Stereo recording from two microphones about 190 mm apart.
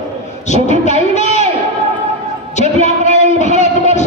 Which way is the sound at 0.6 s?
35° left (ahead or behind).